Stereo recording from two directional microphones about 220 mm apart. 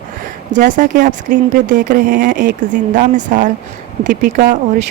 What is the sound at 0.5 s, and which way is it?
A woman's voice, 35° right (ahead or behind).